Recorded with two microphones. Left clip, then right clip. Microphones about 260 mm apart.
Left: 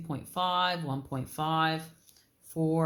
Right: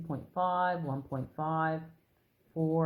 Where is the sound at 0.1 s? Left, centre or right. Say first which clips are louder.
Left 1 dB; centre.